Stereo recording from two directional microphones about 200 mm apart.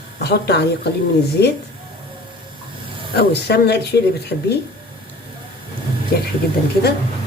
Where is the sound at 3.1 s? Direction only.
55° left (ahead or behind).